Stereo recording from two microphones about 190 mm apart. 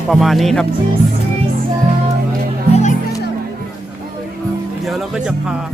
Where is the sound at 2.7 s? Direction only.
35° left (ahead or behind).